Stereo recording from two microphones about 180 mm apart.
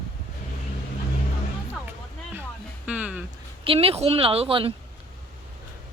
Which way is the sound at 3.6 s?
30° right (ahead or behind).